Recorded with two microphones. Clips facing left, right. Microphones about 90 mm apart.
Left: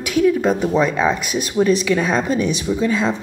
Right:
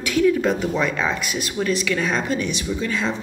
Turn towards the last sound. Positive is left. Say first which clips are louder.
# left 5 dB
turn(degrees=20)  # may be behind; listen again after turning